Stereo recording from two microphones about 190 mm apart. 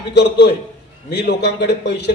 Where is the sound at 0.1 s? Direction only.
65° left (ahead or behind).